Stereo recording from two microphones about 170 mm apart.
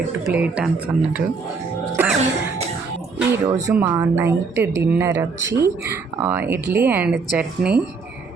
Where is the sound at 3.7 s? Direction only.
15° right (ahead or behind).